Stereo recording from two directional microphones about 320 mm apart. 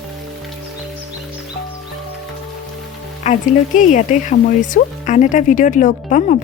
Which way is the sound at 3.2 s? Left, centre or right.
Left.